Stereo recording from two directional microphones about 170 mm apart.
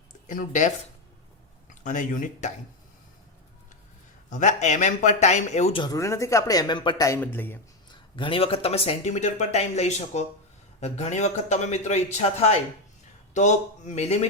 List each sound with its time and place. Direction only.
0.3 s speech: 50° left (ahead or behind)
1.7 s speech: 50° left (ahead or behind)
4.3 s speech: 45° left (ahead or behind)
5.8 s a man's voice: 20° left (ahead or behind)
7.9 s speech: 30° left (ahead or behind)